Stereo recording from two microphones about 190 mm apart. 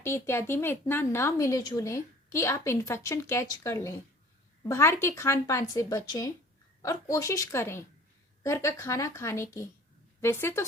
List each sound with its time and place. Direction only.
0.0 s a woman's voice: 10° left (ahead or behind)